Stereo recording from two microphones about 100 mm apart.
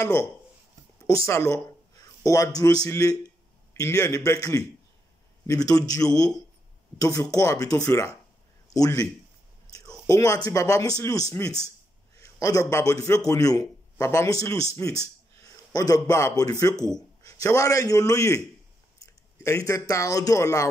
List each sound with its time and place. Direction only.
0.0 s a man's voice: 30° left (ahead or behind)